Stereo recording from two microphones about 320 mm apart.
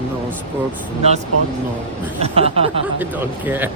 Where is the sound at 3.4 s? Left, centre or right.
Centre.